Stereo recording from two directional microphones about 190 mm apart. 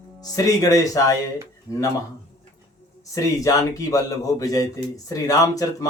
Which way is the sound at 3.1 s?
20° left (ahead or behind).